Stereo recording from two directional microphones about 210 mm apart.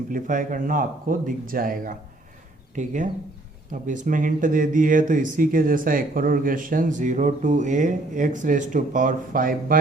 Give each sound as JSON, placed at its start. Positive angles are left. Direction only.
{"t": 0.1, "sound": "speech", "side_deg": -40}